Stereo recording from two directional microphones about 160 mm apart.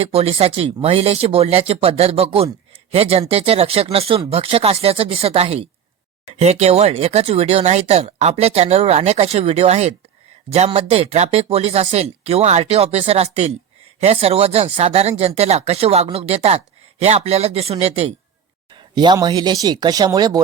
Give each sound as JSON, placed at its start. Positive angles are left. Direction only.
{"t": 0.0, "sound": "speech", "side_deg": -40}
{"t": 18.7, "sound": "speech", "side_deg": -25}